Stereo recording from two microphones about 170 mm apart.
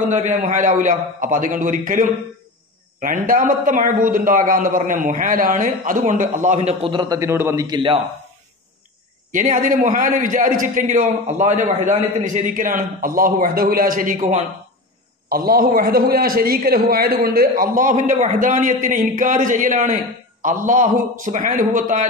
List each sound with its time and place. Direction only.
0.1 s a man's voice: 45° right (ahead or behind); by 7.2 s 30° right (ahead or behind)
7.2 s a man's voice: 15° right (ahead or behind)
7.6 s a man's voice: 30° right (ahead or behind)
9.3 s a man's voice: 50° right (ahead or behind)
15.2 s a man's voice: 60° right (ahead or behind)